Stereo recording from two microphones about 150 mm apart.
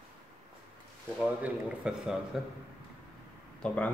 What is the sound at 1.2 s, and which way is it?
A man's voice, 5° right (ahead or behind).